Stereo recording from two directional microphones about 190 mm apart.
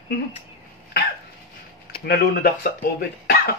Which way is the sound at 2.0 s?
55° left (ahead or behind).